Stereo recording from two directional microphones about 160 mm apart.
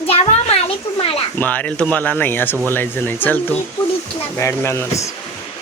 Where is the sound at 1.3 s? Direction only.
10° left (ahead or behind).